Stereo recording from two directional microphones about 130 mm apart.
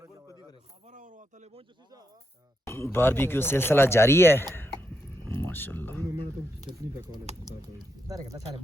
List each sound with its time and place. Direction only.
0.9 s a sound: 85° right
2.6 s speech: 20° left (ahead or behind)
8.0 s speech: 25° right (ahead or behind)